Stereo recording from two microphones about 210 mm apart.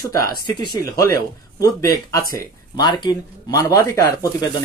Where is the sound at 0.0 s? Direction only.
15° left (ahead or behind).